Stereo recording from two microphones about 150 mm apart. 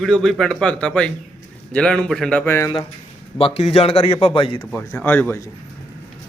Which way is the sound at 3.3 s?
40° left (ahead or behind).